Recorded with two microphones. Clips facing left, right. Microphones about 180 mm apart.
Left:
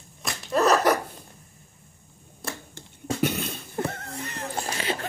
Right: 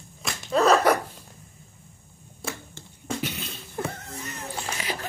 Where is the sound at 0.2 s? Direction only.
Centre (ahead or behind).